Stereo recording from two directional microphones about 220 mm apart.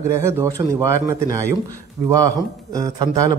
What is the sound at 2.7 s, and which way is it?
Speech, 20° right (ahead or behind).